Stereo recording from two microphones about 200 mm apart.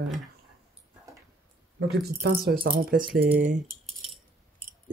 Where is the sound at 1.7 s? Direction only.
55° right (ahead or behind).